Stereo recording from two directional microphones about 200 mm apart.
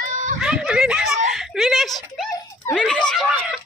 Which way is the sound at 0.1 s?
40° right (ahead or behind).